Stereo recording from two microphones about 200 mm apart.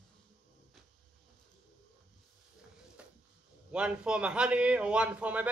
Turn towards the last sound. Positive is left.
turn(degrees=-5)  # may be behind; listen again after turning